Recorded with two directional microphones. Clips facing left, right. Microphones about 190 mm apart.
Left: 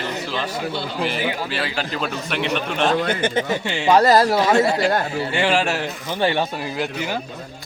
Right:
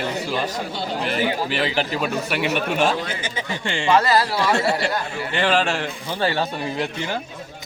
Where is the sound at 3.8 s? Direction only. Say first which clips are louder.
Left 4 dB; 40° left (ahead or behind).